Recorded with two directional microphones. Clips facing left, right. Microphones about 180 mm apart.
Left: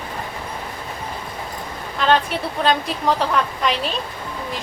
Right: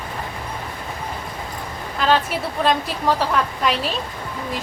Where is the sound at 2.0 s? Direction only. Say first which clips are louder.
Left 1 dB; centre (ahead or behind).